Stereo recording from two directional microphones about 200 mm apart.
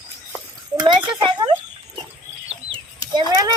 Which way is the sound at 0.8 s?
25° right (ahead or behind).